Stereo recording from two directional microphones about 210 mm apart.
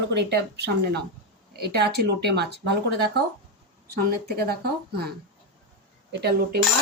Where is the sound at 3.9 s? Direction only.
50° right (ahead or behind).